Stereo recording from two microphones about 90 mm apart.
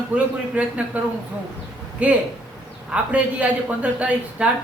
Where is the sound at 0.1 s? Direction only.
15° right (ahead or behind).